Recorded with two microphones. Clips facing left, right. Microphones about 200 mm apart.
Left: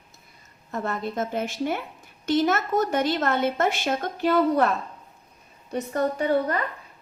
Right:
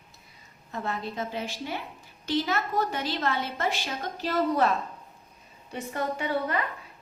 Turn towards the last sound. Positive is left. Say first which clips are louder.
# left 5 dB
turn(degrees=40)  # may be behind; listen again after turning